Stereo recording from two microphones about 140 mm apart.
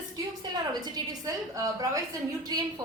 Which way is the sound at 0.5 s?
30° right (ahead or behind).